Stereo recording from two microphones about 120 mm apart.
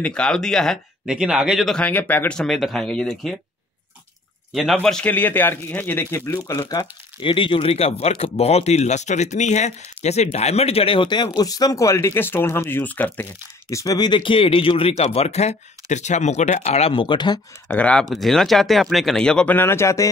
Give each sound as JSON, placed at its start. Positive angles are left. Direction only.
{"t": 0.0, "sound": "speech", "side_deg": 10}
{"t": 1.8, "sound": "speech", "side_deg": 15}
{"t": 4.8, "sound": "a man's voice", "side_deg": 10}
{"t": 7.2, "sound": "speech", "side_deg": 45}
{"t": 17.6, "sound": "a man's voice", "side_deg": 10}